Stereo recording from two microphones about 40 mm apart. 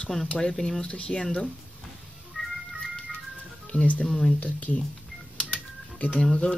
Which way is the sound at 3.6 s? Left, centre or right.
Left.